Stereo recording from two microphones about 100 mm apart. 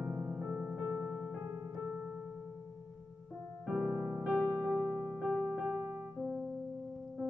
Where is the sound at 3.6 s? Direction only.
10° right (ahead or behind).